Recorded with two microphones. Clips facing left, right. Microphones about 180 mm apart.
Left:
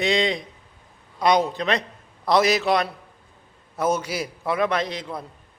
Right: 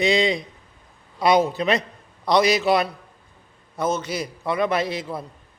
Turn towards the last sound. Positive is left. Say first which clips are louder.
# right 2 dB
turn(degrees=-5)  # may be behind; listen again after turning